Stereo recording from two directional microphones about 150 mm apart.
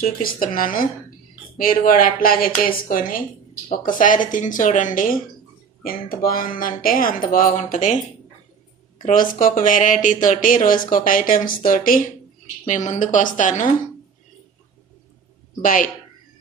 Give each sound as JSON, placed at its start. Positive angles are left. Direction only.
{"t": 0.0, "sound": "speech", "side_deg": 70}
{"t": 5.8, "sound": "speech", "side_deg": 75}
{"t": 9.0, "sound": "speech", "side_deg": 65}
{"t": 12.6, "sound": "speech", "side_deg": 55}
{"t": 15.6, "sound": "speech", "side_deg": 65}